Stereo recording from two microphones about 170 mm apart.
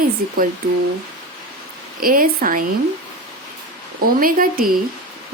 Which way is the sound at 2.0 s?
55° right (ahead or behind).